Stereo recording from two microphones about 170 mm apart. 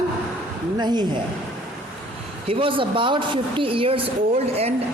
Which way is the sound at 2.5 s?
30° right (ahead or behind).